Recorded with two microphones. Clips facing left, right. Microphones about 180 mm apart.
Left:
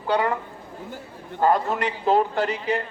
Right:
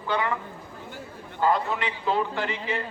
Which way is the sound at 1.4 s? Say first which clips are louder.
Left 3 dB; 45° left (ahead or behind).